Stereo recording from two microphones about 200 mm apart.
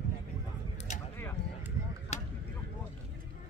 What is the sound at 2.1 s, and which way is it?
Vehicle, 35° left (ahead or behind).